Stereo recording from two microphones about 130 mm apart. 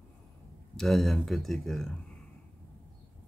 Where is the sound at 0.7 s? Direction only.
5° left (ahead or behind).